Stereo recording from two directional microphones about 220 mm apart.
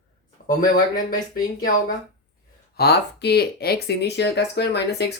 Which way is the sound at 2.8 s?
50° left (ahead or behind).